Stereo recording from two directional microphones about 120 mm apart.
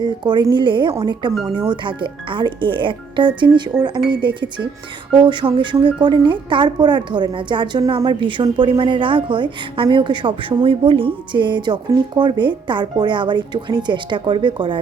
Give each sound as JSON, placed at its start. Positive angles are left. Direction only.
{"t": 0.0, "sound": "a woman's voice", "side_deg": -40}